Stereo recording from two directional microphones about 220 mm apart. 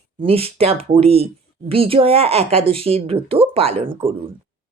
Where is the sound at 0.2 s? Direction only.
25° right (ahead or behind).